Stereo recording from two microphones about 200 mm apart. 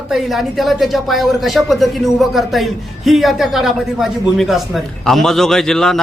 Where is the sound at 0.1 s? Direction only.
Centre (ahead or behind).